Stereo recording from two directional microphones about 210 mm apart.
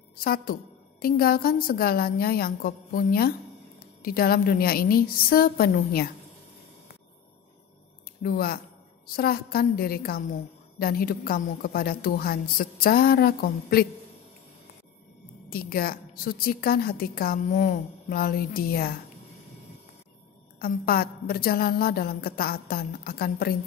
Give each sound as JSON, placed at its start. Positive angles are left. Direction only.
{"t": 0.2, "sound": "a woman's voice", "side_deg": 45}
{"t": 8.2, "sound": "a woman's voice", "side_deg": 45}
{"t": 15.5, "sound": "a woman's voice", "side_deg": 45}
{"t": 20.5, "sound": "a woman's voice", "side_deg": 45}